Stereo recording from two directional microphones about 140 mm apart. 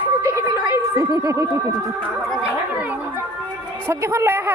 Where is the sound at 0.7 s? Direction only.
20° right (ahead or behind).